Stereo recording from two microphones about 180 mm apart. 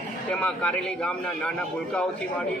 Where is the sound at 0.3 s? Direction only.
5° left (ahead or behind).